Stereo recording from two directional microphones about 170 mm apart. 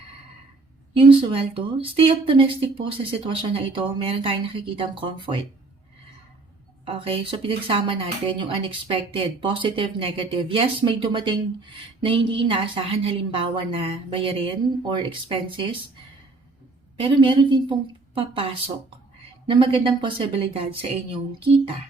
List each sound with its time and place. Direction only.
1.0 s speech: 30° right (ahead or behind)
6.8 s speech: 30° right (ahead or behind)
17.0 s speech: 30° right (ahead or behind)